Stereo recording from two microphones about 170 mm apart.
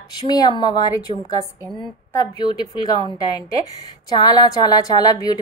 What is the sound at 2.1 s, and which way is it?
Speech, 25° left (ahead or behind).